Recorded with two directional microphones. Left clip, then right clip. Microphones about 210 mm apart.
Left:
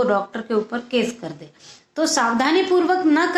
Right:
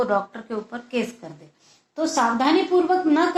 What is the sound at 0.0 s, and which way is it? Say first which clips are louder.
Speech: left 3 dB; 25° left (ahead or behind).